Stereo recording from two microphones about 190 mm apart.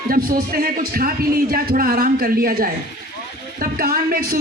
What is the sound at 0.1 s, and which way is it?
Speech, 50° right (ahead or behind).